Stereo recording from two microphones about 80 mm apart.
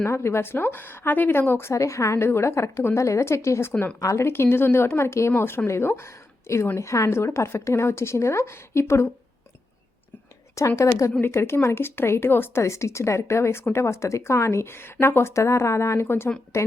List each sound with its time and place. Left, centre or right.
0.0 s a woman's voice: left
10.5 s a woman's voice: left